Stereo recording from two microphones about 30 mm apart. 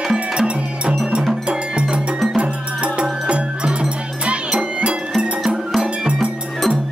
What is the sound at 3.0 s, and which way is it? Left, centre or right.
Music, right.